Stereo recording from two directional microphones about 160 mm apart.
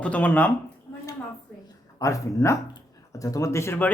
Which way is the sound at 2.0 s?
20° left (ahead or behind).